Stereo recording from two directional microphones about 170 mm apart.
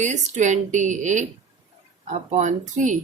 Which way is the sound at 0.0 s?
45° right (ahead or behind).